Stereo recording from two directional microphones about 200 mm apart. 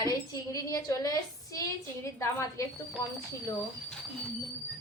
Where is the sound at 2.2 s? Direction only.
15° left (ahead or behind).